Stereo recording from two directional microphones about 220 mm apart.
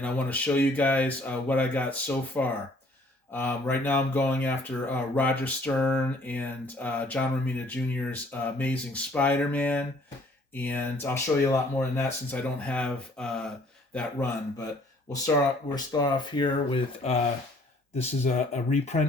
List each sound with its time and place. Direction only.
0.0 s speech: 5° left (ahead or behind)
15.7 s speech: 20° left (ahead or behind)